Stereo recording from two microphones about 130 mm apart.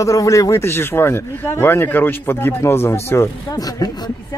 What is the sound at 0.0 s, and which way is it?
Speech, 25° left (ahead or behind).